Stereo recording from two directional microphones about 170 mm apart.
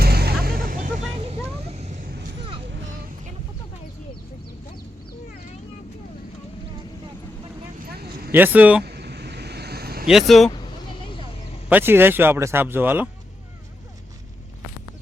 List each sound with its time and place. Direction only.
0.0 s music: 70° right (ahead or behind)
1.2 s vehicle: 35° right (ahead or behind)
7.9 s vehicle: 65° right (ahead or behind)
8.3 s speech: 10° right (ahead or behind)
8.8 s vehicle: 75° right (ahead or behind)
10.1 s speech: centre (ahead or behind)
11.7 s speech: 10° right (ahead or behind)